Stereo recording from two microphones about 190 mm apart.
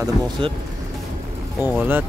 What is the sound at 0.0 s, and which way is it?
Speech, 20° right (ahead or behind).